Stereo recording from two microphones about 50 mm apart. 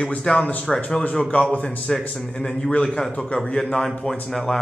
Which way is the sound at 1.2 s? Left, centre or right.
Centre.